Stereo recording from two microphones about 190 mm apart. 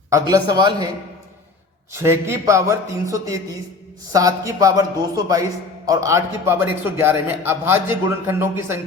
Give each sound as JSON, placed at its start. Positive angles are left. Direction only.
{"t": 0.1, "sound": "a man's voice", "side_deg": -20}
{"t": 1.9, "sound": "a man's voice", "side_deg": -15}